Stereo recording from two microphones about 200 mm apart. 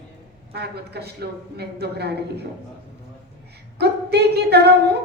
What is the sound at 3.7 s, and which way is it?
A woman's voice, 55° right (ahead or behind).